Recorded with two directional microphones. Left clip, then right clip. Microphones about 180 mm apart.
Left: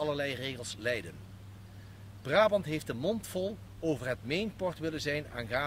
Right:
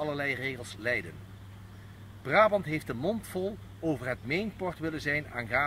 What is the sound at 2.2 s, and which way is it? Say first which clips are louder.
Speech: right 2 dB; 25° left (ahead or behind).